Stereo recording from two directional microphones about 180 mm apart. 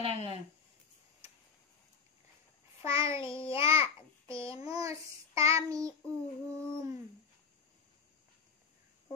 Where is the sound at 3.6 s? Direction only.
30° left (ahead or behind).